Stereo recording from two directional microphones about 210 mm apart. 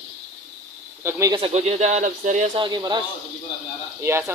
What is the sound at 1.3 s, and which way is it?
Speech, 30° right (ahead or behind).